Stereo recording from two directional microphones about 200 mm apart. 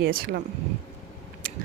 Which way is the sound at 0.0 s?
45° right (ahead or behind).